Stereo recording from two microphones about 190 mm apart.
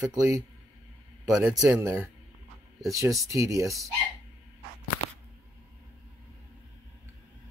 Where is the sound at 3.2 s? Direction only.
15° right (ahead or behind).